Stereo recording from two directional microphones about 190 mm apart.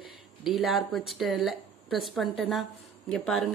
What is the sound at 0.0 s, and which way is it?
Speech, centre (ahead or behind).